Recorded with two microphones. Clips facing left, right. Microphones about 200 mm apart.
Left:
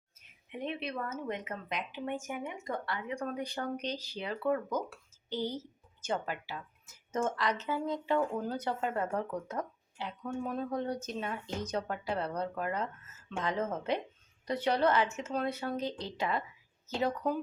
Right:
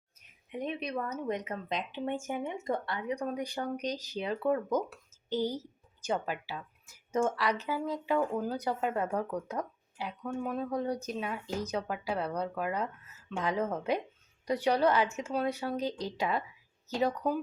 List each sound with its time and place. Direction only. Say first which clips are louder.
0.5 s speech: right 2 dB; 15° right (ahead or behind)